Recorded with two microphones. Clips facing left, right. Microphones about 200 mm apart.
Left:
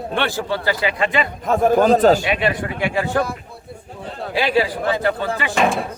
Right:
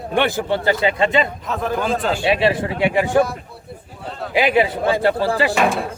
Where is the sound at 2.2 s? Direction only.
30° right (ahead or behind).